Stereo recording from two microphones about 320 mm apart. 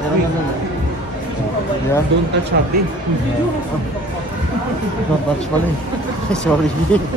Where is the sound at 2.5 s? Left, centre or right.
Right.